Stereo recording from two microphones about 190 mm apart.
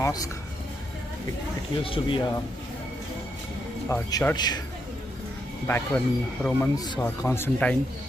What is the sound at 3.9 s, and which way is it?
Speech, 15° left (ahead or behind).